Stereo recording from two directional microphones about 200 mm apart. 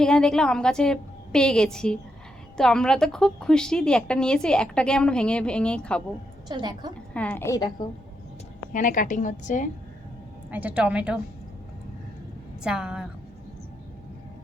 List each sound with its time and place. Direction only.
0.0 s a woman's voice: 5° left (ahead or behind)
6.5 s a woman's voice: 20° right (ahead or behind)
7.1 s a woman's voice: 5° left (ahead or behind)
8.7 s a woman's voice: 40° left (ahead or behind)
10.5 s a woman's voice: 5° right (ahead or behind)
12.6 s a woman's voice: 5° right (ahead or behind)